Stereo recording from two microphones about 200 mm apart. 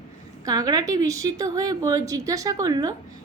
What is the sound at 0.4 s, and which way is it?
A woman's voice, 20° right (ahead or behind).